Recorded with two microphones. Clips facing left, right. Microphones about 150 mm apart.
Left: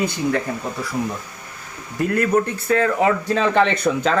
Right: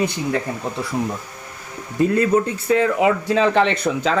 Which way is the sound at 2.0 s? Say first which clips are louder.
Right 2 dB; 25° right (ahead or behind).